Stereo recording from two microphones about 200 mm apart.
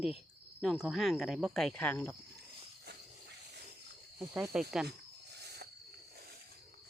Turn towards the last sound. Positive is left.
turn(degrees=-55)  # may be behind; listen again after turning